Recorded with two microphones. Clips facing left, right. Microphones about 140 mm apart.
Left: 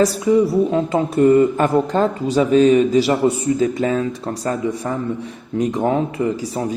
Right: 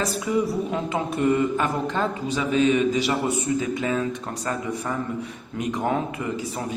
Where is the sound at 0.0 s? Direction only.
35° left (ahead or behind).